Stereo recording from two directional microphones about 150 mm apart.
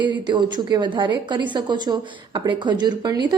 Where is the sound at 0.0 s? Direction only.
30° right (ahead or behind).